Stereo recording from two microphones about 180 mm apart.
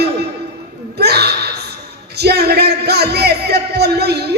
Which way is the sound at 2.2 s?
65° right (ahead or behind).